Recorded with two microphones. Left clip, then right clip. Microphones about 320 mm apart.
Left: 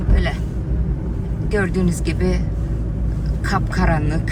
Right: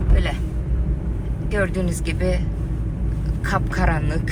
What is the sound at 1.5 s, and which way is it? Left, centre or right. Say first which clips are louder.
Speech: left 2 dB; centre.